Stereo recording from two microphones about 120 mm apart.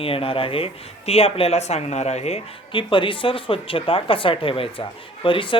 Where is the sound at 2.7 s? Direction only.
45° left (ahead or behind).